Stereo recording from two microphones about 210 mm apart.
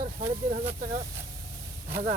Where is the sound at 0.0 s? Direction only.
45° right (ahead or behind).